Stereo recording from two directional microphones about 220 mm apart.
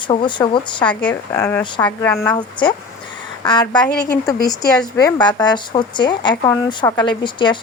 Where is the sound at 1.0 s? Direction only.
10° left (ahead or behind).